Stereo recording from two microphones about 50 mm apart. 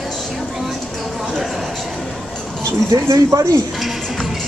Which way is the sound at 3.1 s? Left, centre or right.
Right.